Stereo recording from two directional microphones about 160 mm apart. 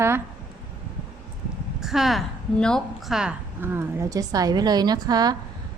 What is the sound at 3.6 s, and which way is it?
Speech, 15° right (ahead or behind).